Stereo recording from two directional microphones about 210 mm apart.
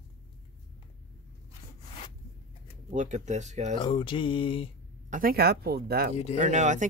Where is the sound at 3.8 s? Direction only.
25° left (ahead or behind).